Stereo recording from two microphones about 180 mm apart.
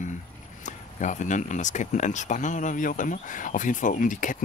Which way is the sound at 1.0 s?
45° left (ahead or behind).